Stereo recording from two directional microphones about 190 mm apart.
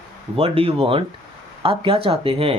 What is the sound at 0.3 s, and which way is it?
Speech, 30° right (ahead or behind).